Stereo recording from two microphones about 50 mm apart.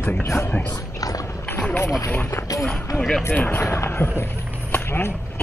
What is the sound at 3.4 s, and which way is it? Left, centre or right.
Speech, left.